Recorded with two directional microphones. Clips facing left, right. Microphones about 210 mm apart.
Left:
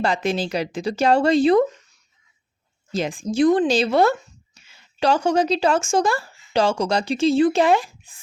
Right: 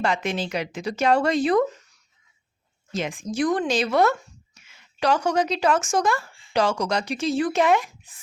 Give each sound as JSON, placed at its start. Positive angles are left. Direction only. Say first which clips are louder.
{"t": 0.0, "sound": "speech", "louder": "left 3 dB", "side_deg": 35}
{"t": 2.9, "sound": "speech", "louder": "left 4 dB", "side_deg": 35}